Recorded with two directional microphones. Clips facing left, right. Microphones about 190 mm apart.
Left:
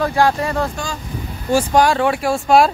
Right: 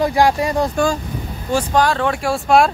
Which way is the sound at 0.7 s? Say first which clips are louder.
Right 9 dB; 55° right (ahead or behind).